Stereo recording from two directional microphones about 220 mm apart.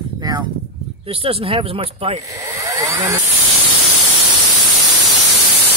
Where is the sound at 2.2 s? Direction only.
15° right (ahead or behind).